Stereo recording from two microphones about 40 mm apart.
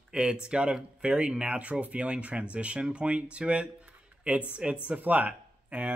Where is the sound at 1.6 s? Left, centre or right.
Right.